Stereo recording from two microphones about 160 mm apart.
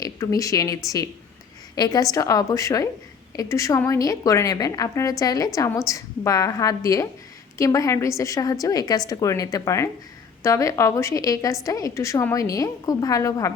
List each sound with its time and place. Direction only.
0.0 s a woman's voice: 20° left (ahead or behind)